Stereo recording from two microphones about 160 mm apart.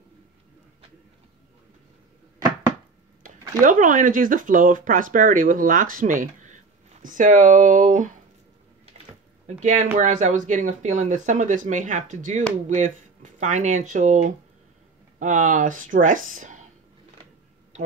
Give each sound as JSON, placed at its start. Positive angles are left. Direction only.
{"t": 3.3, "sound": "speech", "side_deg": -55}
{"t": 9.0, "sound": "a sound", "side_deg": -45}
{"t": 9.9, "sound": "speech", "side_deg": -50}